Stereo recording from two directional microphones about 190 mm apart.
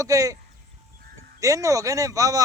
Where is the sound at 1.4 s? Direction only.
15° right (ahead or behind).